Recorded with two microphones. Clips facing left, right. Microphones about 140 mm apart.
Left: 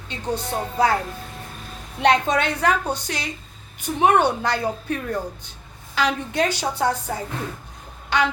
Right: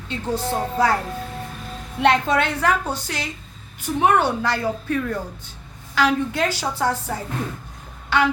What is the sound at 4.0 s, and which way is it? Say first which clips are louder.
A woman's voice: left 1 dB; 20° left (ahead or behind).